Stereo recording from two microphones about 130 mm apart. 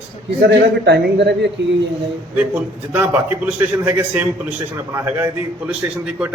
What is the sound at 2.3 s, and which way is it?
A man's voice, 15° right (ahead or behind).